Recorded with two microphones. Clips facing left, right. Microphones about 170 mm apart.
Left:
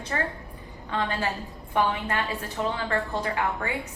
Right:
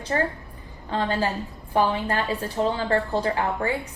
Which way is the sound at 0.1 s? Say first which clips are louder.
Right 6 dB; 30° right (ahead or behind).